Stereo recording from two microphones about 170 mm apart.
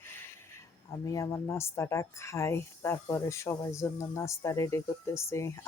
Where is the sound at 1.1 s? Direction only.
20° left (ahead or behind).